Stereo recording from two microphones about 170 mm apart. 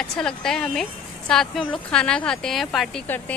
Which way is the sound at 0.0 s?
5° left (ahead or behind).